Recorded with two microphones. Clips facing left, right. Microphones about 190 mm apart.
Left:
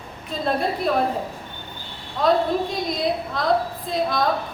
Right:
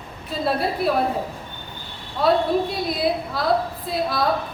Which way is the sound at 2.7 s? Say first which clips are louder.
Right 1 dB; 5° right (ahead or behind).